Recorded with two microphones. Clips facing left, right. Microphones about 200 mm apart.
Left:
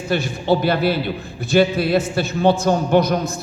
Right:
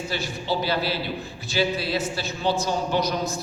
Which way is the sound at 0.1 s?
55° left (ahead or behind).